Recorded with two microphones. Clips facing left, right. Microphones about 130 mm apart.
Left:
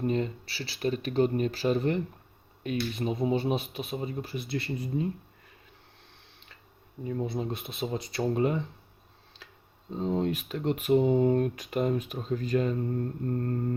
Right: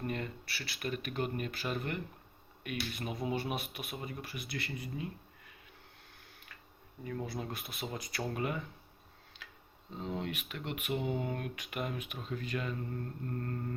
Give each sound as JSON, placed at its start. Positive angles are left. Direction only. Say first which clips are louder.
{"t": 0.0, "sound": "speech", "louder": "left 9 dB", "side_deg": 25}
{"t": 7.0, "sound": "speech", "louder": "left 7 dB", "side_deg": 25}
{"t": 9.4, "sound": "a sound", "louder": "left 2 dB", "side_deg": 35}
{"t": 9.9, "sound": "speech", "louder": "left 10 dB", "side_deg": 35}